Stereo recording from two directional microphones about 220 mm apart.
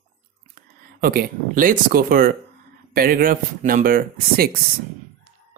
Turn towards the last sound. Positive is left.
turn(degrees=-40)  # may be behind; listen again after turning